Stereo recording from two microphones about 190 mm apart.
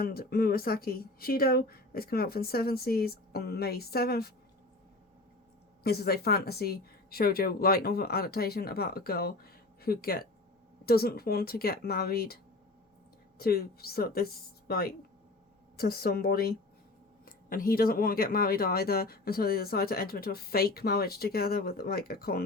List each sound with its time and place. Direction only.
0.0 s speech: 50° left (ahead or behind)
5.8 s speech: 55° left (ahead or behind)
13.4 s speech: 55° left (ahead or behind)